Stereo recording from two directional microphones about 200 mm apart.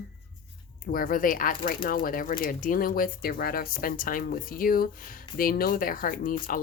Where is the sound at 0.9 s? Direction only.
45° left (ahead or behind).